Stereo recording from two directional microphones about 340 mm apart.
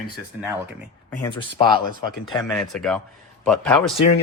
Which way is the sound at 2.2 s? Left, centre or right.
Centre.